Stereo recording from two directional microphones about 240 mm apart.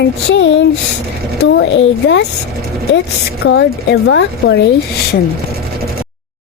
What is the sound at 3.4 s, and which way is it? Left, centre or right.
Speech, left.